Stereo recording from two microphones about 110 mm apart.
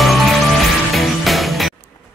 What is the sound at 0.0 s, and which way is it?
Music, centre (ahead or behind).